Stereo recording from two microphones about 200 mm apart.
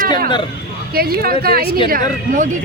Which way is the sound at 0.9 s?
50° right (ahead or behind).